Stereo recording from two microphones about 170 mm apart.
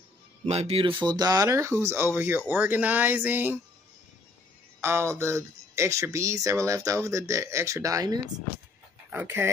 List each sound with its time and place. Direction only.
0.5 s speech: 35° right (ahead or behind)
1.0 s speech: 25° right (ahead or behind)
4.8 s speech: 15° right (ahead or behind)